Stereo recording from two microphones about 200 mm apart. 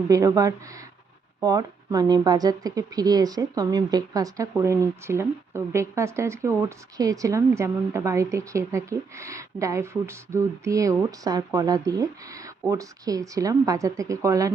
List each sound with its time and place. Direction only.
0.1 s a woman's voice: 15° right (ahead or behind)